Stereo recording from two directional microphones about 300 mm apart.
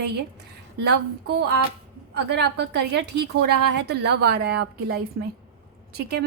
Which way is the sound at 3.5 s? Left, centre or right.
Right.